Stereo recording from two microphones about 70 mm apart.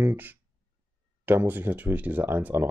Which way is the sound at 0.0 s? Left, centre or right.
Right.